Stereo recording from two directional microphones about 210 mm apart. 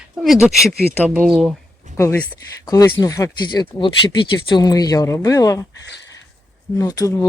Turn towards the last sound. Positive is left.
turn(degrees=15)  # may be behind; listen again after turning